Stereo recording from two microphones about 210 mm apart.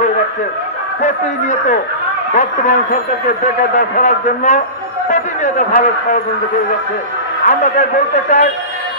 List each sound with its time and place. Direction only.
1.0 s speech: 35° left (ahead or behind)
7.4 s speech: 35° left (ahead or behind)